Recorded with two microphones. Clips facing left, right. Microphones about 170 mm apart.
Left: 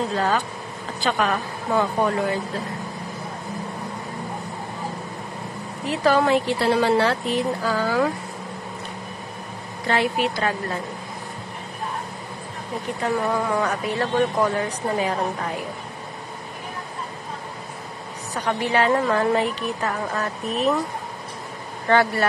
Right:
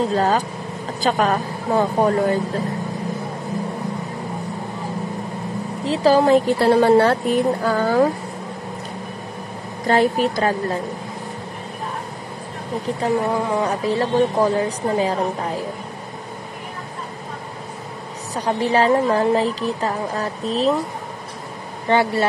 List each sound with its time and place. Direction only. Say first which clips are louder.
0.1 s speech: right 4 dB; 40° right (ahead or behind)
5.9 s a woman's voice: right 4 dB; 30° right (ahead or behind); by 8.0 s 50° right (ahead or behind)
9.8 s speech: right 5 dB; 40° right (ahead or behind)
12.8 s speech: right 3 dB; 25° right (ahead or behind)
18.3 s a woman's voice: right 4 dB; 30° right (ahead or behind)
21.8 s a woman's voice: right 1 dB; 20° right (ahead or behind)